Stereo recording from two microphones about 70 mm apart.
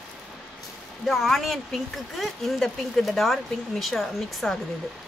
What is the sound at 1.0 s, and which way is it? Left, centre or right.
Speech, centre.